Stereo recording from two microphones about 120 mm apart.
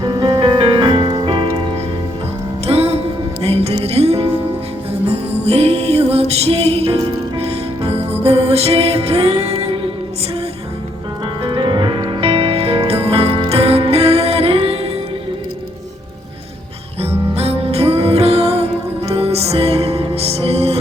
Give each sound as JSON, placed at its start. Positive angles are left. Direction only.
{"t": 0.0, "sound": "music", "side_deg": -35}
{"t": 2.6, "sound": "music", "side_deg": -55}
{"t": 11.4, "sound": "music", "side_deg": -40}
{"t": 17.3, "sound": "music", "side_deg": -55}